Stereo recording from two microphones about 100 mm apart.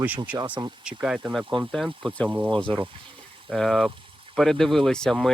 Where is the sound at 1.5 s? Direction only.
Centre (ahead or behind).